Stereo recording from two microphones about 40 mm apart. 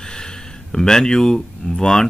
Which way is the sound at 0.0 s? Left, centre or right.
Centre.